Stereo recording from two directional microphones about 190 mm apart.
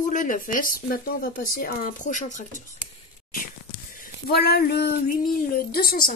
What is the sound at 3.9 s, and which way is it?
Speech, 50° left (ahead or behind).